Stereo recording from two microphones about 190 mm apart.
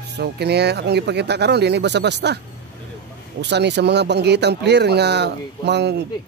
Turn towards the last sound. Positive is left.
turn(degrees=-60)  # may be behind; listen again after turning